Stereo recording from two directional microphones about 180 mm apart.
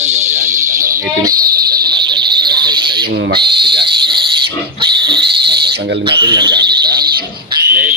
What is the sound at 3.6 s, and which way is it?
Cricket, 65° right (ahead or behind).